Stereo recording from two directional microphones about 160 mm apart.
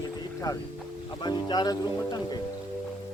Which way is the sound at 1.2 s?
25° left (ahead or behind).